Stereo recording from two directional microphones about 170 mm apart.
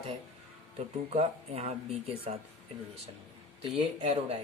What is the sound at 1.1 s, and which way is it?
Speech, 40° right (ahead or behind).